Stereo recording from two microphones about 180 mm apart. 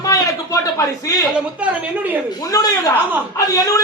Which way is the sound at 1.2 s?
5° right (ahead or behind).